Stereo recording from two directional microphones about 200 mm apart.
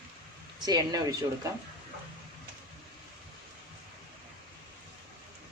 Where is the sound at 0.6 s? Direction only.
20° right (ahead or behind).